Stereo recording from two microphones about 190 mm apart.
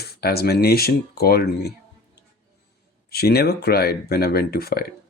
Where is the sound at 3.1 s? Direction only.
55° left (ahead or behind).